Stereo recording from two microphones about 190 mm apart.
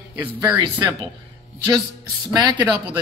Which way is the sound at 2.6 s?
5° right (ahead or behind).